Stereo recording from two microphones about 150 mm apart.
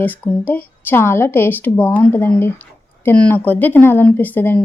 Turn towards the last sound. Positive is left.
turn(degrees=10)  # may be behind; listen again after turning